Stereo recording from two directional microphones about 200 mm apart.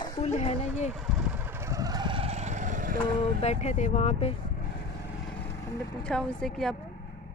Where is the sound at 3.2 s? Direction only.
30° left (ahead or behind).